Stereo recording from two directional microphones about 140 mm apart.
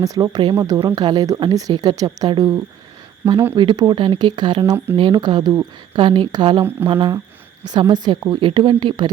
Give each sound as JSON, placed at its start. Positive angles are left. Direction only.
{"t": 0.0, "sound": "a woman's voice", "side_deg": -25}